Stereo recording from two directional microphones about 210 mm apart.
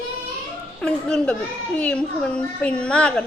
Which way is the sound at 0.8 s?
5° left (ahead or behind).